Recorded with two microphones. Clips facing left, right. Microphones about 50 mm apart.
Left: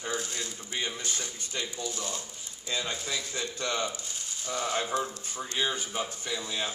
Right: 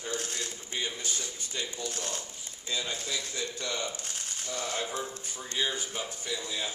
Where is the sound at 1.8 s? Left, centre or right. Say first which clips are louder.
Left 1 dB; right.